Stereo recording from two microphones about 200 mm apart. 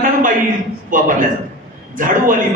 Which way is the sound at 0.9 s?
40° right (ahead or behind).